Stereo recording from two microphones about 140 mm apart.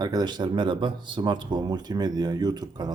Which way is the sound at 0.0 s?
30° right (ahead or behind).